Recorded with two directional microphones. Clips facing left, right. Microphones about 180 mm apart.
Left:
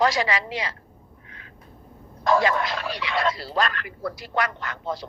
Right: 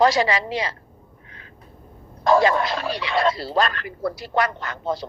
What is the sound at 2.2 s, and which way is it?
Speech, 30° right (ahead or behind).